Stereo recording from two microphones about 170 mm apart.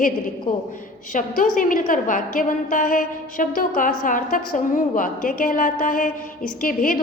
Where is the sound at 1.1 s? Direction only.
50° left (ahead or behind).